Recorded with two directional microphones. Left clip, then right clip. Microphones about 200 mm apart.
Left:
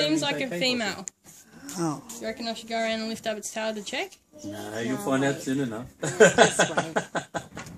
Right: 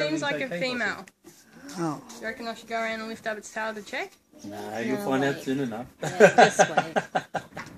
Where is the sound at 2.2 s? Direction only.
55° left (ahead or behind).